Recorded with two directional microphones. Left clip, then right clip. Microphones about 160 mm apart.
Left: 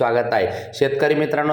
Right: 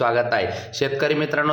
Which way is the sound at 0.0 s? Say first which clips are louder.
Left 2 dB; 10° left (ahead or behind).